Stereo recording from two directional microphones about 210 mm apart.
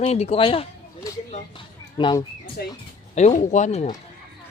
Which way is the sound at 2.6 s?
45° left (ahead or behind).